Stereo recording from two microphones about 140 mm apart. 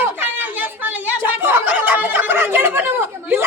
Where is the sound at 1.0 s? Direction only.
15° right (ahead or behind).